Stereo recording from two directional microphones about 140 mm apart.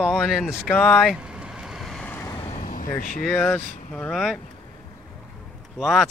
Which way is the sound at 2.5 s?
65° left (ahead or behind).